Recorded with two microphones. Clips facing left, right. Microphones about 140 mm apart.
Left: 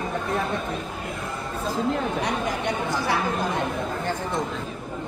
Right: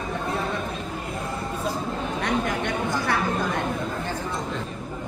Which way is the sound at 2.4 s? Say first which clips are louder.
Even; 50° right (ahead or behind).